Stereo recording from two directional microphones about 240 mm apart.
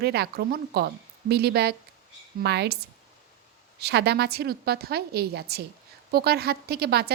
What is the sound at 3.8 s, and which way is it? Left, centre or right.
A woman's voice, right.